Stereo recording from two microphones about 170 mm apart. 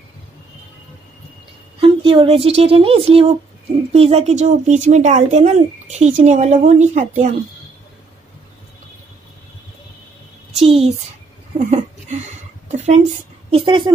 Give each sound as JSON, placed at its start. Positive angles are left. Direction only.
{"t": 1.8, "sound": "speech", "side_deg": -30}
{"t": 10.5, "sound": "a child's voice", "side_deg": -35}
{"t": 11.5, "sound": "a sound", "side_deg": -40}
{"t": 13.7, "sound": "a woman's voice", "side_deg": -30}